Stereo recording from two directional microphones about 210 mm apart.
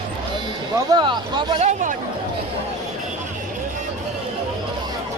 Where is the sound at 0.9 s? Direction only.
20° right (ahead or behind).